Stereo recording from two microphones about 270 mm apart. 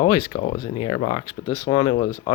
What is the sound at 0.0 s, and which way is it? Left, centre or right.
Speech, centre.